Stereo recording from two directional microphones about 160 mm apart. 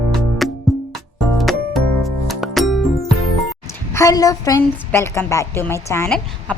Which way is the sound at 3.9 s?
20° left (ahead or behind).